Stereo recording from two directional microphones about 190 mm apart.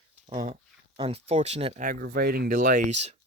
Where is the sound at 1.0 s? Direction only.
30° right (ahead or behind).